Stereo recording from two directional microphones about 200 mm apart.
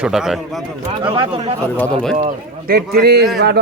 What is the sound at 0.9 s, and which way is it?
Speech, 25° right (ahead or behind).